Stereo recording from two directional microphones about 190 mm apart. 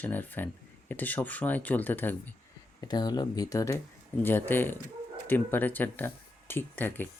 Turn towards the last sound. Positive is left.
turn(degrees=10)  # may be behind; listen again after turning